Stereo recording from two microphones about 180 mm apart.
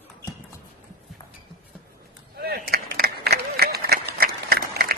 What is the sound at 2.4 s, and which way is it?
Run, 55° right (ahead or behind).